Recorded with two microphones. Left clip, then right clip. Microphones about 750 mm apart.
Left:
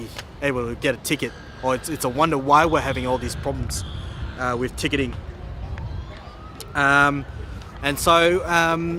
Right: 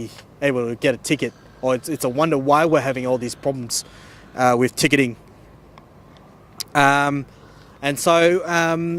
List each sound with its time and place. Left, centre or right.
0.0 s speech: right
6.6 s speech: right